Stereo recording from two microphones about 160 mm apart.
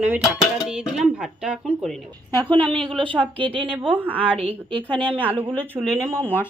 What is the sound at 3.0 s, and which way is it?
Speech, 30° right (ahead or behind).